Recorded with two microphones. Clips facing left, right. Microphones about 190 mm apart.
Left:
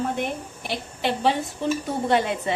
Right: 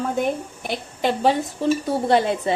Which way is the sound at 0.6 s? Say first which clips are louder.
Right 4 dB; 45° right (ahead or behind).